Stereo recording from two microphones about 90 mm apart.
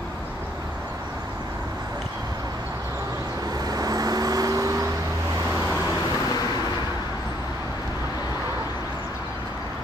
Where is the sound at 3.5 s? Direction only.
45° right (ahead or behind).